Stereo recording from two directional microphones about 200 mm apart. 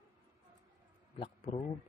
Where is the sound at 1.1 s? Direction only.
25° left (ahead or behind).